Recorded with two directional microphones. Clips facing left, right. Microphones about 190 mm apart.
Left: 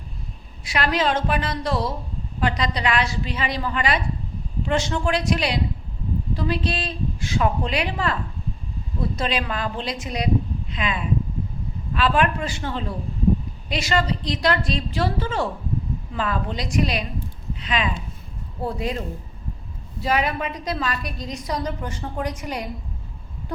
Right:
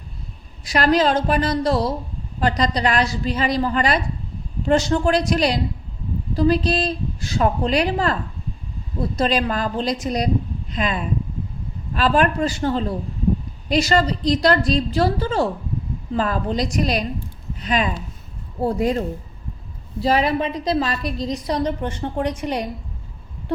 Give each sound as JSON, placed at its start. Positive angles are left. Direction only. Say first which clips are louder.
{"t": 0.6, "sound": "a woman's voice", "louder": "right 5 dB", "side_deg": -40}
{"t": 9.1, "sound": "a woman's voice", "louder": "right 8 dB", "side_deg": -40}